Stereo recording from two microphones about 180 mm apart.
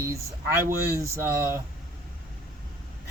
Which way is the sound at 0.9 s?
15° right (ahead or behind).